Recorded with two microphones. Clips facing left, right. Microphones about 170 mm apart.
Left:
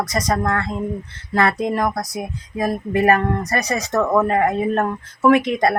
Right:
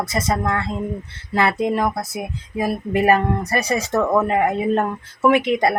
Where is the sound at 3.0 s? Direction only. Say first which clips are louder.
Even; 25° right (ahead or behind).